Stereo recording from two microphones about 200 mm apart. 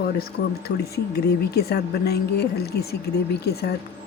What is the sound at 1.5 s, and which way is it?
Speech, 50° left (ahead or behind).